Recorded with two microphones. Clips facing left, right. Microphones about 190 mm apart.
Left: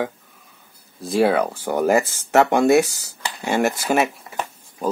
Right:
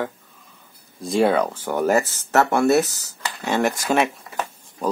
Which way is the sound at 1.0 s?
5° left (ahead or behind).